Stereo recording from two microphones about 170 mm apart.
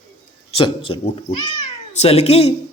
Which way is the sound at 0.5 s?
30° left (ahead or behind).